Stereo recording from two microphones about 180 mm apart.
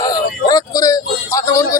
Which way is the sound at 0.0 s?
20° left (ahead or behind).